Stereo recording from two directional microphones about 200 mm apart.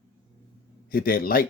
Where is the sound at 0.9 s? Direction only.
45° left (ahead or behind).